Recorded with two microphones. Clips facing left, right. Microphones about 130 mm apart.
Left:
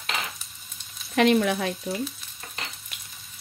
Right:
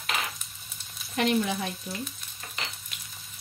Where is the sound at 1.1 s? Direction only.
75° left (ahead or behind).